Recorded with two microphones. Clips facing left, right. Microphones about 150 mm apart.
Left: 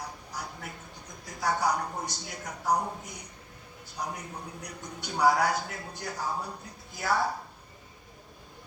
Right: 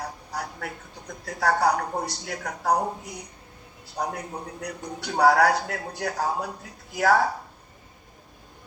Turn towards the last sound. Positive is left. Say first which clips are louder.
# right 8 dB
turn(degrees=-75)  # may be behind; listen again after turning